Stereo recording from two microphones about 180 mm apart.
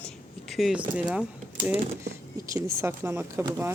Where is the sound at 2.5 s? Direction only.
15° right (ahead or behind).